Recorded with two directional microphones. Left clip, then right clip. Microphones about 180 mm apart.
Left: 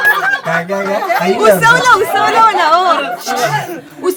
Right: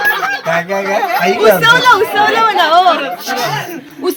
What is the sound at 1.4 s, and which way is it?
Speech, 20° left (ahead or behind).